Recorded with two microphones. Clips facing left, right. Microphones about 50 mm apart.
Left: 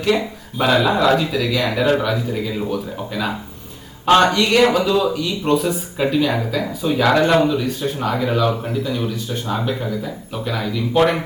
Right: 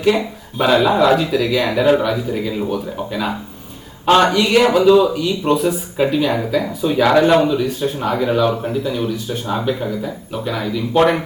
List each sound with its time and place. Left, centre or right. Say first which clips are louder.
0.6 s a man's voice: right 2 dB; centre